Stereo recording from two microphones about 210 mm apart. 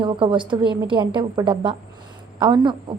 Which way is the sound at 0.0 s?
25° right (ahead or behind).